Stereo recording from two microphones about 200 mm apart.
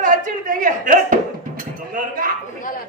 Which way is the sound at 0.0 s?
40° right (ahead or behind).